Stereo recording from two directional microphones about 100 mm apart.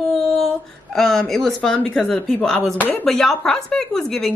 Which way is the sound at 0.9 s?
5° left (ahead or behind).